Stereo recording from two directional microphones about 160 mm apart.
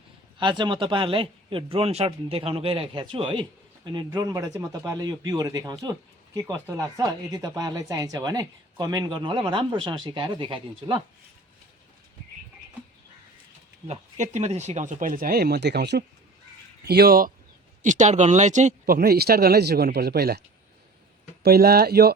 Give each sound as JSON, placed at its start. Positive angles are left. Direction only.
{"t": 0.3, "sound": "a man's voice", "side_deg": -30}
{"t": 13.8, "sound": "speech", "side_deg": -45}
{"t": 17.8, "sound": "speech", "side_deg": -50}
{"t": 18.9, "sound": "speech", "side_deg": -75}
{"t": 21.4, "sound": "speech", "side_deg": -75}